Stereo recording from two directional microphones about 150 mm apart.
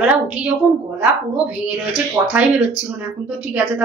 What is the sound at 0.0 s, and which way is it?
A woman's voice, 10° right (ahead or behind).